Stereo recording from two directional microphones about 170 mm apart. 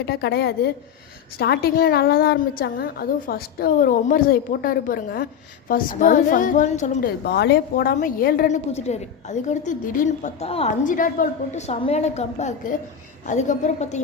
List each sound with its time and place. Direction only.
0.0 s a woman's voice: 75° left (ahead or behind); by 7.1 s 45° left (ahead or behind)
7.3 s a woman's voice: 75° left (ahead or behind)
7.9 s a woman's voice: 55° left (ahead or behind)
8.7 s a woman's voice: 40° left (ahead or behind)
10.8 s a woman's voice: 50° left (ahead or behind)